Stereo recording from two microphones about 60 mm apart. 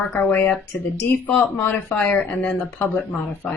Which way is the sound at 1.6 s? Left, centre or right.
Left.